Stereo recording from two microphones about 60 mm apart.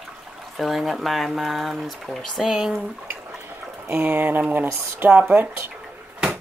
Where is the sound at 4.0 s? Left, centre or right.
Right.